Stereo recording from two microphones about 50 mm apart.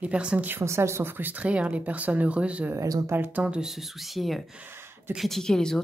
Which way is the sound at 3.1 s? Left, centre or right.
Right.